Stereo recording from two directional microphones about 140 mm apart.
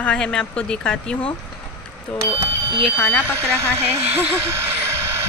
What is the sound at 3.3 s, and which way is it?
Speech, 20° right (ahead or behind).